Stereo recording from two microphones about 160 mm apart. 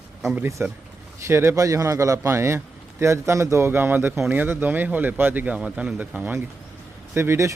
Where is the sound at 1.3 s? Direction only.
15° right (ahead or behind).